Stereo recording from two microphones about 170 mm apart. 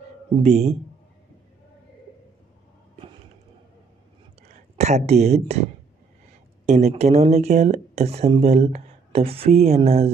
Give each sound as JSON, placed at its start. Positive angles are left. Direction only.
{"t": 0.3, "sound": "speech", "side_deg": -40}
{"t": 4.7, "sound": "speech", "side_deg": -40}